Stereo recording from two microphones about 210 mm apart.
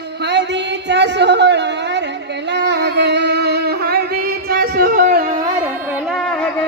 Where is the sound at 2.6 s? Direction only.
55° right (ahead or behind).